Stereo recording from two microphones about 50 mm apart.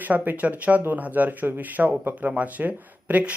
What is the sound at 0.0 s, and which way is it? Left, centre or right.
Speech, right.